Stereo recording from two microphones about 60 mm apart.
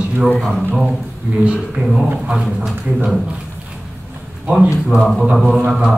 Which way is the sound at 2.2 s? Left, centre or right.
Centre.